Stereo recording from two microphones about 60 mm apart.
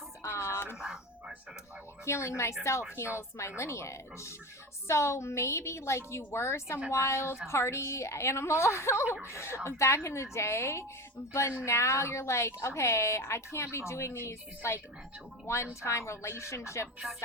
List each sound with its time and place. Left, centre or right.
0.2 s a sound: left
2.0 s speech: left
15.8 s speech: left